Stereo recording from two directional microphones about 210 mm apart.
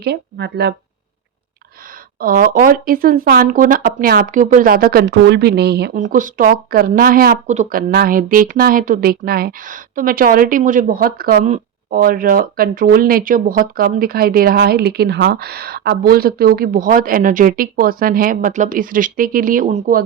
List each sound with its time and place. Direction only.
0.0 s speech: 50° right (ahead or behind)
2.1 s speech: 45° right (ahead or behind)